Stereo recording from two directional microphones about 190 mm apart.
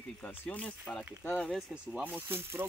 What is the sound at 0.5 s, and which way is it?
Speech, 5° left (ahead or behind).